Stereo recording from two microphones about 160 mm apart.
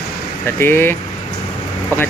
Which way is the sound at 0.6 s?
15° left (ahead or behind).